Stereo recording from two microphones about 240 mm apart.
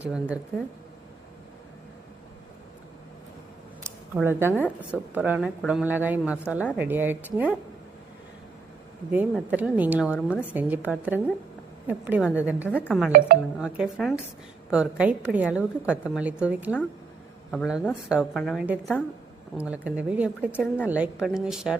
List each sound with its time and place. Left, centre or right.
0.0 s a woman's voice: centre
3.8 s a woman's voice: centre
9.1 s a woman's voice: centre
12.6 s a woman's voice: centre
13.1 s speech: right
13.6 s a woman's voice: centre
20.5 s a woman's voice: centre
20.8 s a woman's voice: centre